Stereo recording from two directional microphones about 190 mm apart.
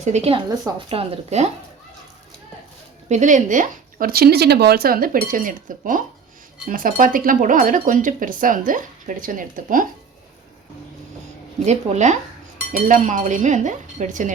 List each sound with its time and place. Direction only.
0.0 s dishes: 35° right (ahead or behind)
3.1 s speech: 40° right (ahead or behind)
11.6 s dishes: 35° right (ahead or behind)